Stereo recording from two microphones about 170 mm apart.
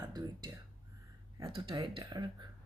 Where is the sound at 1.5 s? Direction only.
30° right (ahead or behind).